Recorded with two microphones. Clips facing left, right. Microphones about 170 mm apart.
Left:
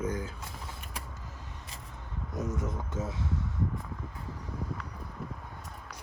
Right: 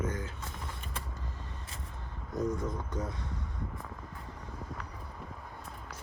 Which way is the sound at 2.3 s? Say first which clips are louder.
Right 2 dB; 20° left (ahead or behind).